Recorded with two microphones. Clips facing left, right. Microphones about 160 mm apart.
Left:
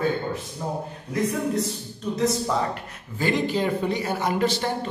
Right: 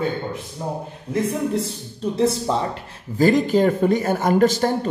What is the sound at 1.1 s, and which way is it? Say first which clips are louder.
Speech: right 2 dB; 25° right (ahead or behind).